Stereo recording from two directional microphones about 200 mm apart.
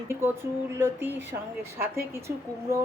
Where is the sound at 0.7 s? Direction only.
10° right (ahead or behind).